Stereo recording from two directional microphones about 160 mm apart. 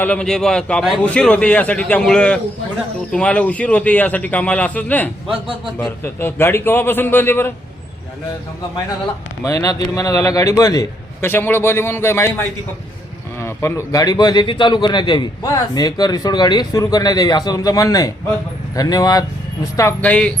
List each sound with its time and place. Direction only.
0.0 s a man's voice: 5° left (ahead or behind)
9.4 s a man's voice: 20° left (ahead or behind)